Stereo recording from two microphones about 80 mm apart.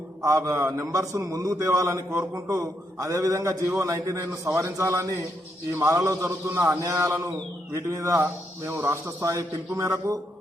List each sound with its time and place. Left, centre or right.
0.2 s a man's voice: right